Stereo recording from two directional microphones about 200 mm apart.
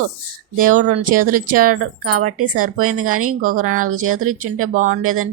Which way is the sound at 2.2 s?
90° right.